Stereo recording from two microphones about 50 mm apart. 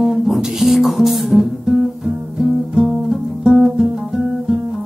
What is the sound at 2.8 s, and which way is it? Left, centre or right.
Music, centre.